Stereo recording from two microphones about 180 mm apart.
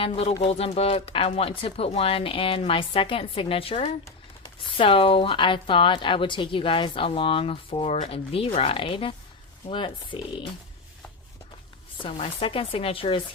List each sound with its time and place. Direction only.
0.0 s a woman's voice: 35° left (ahead or behind)
12.0 s a woman's voice: 30° left (ahead or behind)